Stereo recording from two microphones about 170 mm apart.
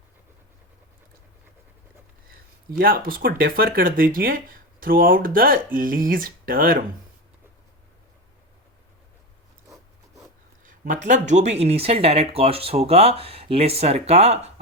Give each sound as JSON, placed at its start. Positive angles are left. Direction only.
{"t": 2.6, "sound": "speech", "side_deg": -60}
{"t": 10.6, "sound": "speech", "side_deg": -50}